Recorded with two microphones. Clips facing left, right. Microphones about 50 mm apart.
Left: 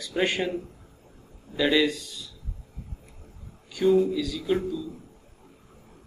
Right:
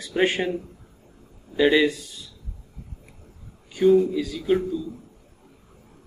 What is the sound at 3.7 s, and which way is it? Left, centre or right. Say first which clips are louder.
Speech: right 3 dB; centre.